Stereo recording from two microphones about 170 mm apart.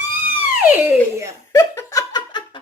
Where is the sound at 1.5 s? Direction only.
20° left (ahead or behind).